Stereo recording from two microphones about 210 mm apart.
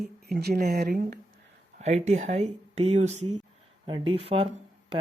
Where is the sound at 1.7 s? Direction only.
35° right (ahead or behind).